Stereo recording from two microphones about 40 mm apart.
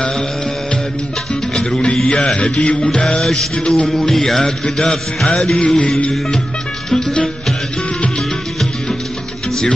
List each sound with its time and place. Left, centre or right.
1.5 s music: left
3.9 s music: centre
6.9 s music: centre